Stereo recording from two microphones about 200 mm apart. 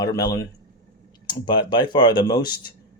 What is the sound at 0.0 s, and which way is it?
A man's voice, 20° left (ahead or behind).